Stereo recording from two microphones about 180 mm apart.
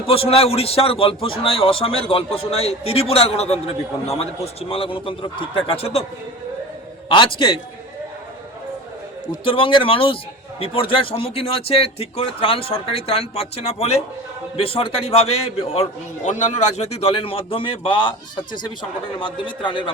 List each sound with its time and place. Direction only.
0.1 s a man's voice: 30° left (ahead or behind)
7.1 s speech: 30° left (ahead or behind)
9.3 s a man's voice: 30° left (ahead or behind)